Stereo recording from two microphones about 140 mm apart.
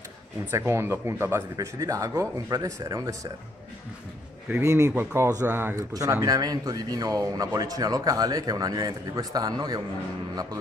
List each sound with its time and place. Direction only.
0.5 s speech: 20° right (ahead or behind)
4.5 s speech: 20° right (ahead or behind)